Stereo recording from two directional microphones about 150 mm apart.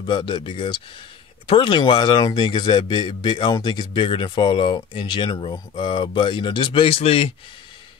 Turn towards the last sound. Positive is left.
turn(degrees=40)  # may be behind; listen again after turning